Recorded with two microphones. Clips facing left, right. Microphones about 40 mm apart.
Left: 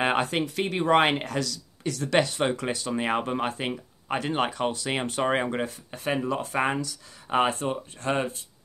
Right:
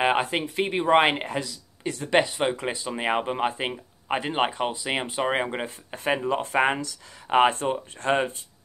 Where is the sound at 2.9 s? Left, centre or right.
Centre.